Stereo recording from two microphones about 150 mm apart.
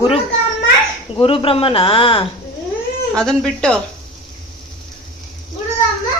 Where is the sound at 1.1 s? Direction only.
40° left (ahead or behind).